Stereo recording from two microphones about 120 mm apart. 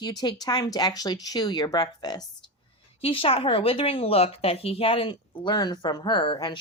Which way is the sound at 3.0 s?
50° left (ahead or behind).